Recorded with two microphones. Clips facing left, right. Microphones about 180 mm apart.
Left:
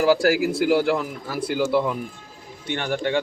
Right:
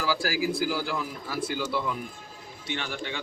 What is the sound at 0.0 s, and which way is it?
Speech, 65° left (ahead or behind).